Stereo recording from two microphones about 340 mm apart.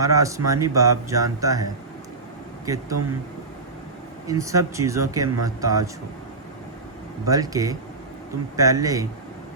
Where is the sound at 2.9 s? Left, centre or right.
Right.